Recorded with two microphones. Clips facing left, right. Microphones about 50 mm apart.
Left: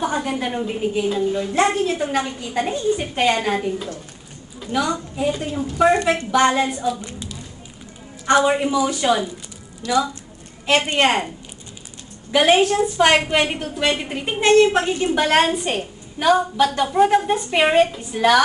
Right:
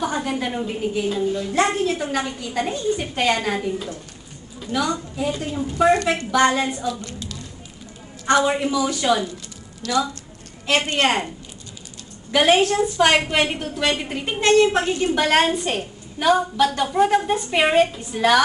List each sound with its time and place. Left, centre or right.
0.2 s a woman's voice: centre
4.6 s a woman's voice: centre
11.1 s a woman's voice: centre
12.4 s a woman's voice: centre
13.1 s a woman's voice: centre
15.2 s a woman's voice: centre